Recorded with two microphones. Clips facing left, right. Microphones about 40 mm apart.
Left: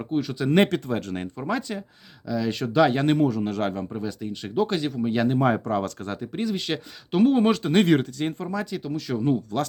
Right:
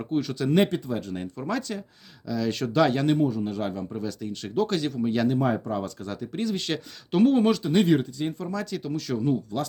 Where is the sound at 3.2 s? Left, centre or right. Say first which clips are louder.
Left 2 dB; left.